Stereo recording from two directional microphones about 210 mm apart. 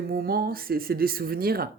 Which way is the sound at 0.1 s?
45° right (ahead or behind).